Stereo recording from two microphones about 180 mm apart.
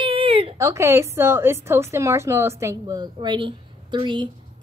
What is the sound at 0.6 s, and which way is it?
A woman's voice, 15° right (ahead or behind).